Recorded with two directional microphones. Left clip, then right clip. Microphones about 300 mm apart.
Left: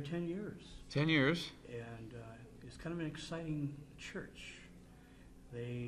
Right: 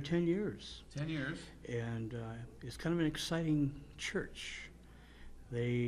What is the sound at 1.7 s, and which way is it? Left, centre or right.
Speech, right.